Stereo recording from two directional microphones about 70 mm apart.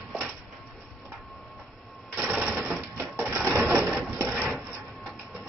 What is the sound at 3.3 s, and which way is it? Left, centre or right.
Cash register, right.